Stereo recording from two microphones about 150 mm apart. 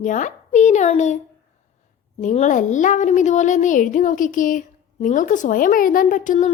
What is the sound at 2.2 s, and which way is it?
A woman's voice, 55° left (ahead or behind).